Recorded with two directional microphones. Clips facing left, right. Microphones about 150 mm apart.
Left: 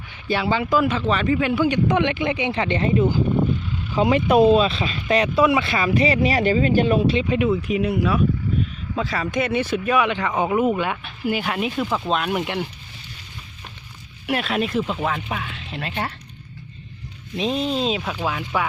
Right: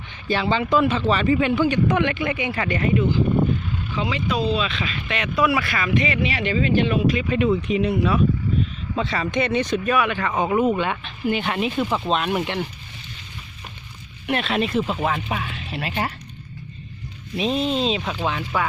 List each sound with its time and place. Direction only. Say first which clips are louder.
0.3 s speech: even; 10° left (ahead or behind)
1.6 s speech: even; 15° left (ahead or behind)
3.9 s speech: left 9 dB; 50° left (ahead or behind)
4.6 s speech: left 4 dB; 35° left (ahead or behind)
7.2 s speech: even; 15° left (ahead or behind)
14.3 s speech: even; 5° left (ahead or behind)
17.3 s speech: right 1 dB; centre (ahead or behind)